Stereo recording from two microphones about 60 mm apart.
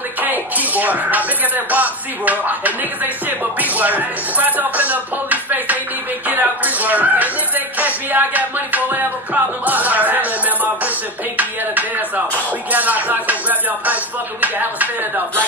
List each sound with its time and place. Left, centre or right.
0.2 s speech: right
12.7 s speech: right